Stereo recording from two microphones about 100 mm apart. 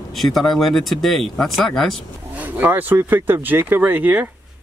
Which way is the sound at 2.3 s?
15° right (ahead or behind).